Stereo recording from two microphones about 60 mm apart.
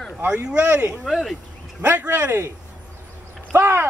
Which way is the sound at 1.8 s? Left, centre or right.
Right.